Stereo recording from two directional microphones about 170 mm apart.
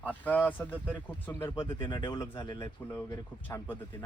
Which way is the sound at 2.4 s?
25° left (ahead or behind).